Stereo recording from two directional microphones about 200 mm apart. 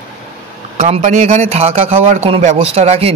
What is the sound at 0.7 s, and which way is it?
A man's voice, 35° right (ahead or behind).